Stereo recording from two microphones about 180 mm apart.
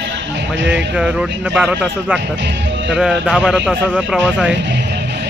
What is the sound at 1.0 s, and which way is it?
Speech, 5° right (ahead or behind).